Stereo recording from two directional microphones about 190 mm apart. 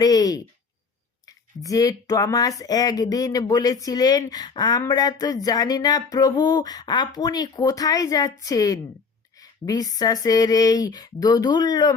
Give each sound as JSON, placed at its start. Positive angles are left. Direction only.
{"t": 0.0, "sound": "speech", "side_deg": 20}
{"t": 1.6, "sound": "speech", "side_deg": 20}